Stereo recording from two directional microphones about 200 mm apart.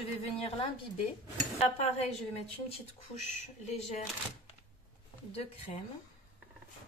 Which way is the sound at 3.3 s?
35° left (ahead or behind).